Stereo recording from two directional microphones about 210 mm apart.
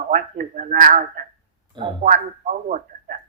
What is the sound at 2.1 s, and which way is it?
A man's voice, 35° right (ahead or behind).